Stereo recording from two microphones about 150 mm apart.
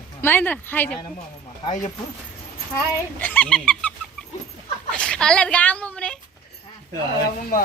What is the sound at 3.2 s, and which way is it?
Fowl, 10° left (ahead or behind).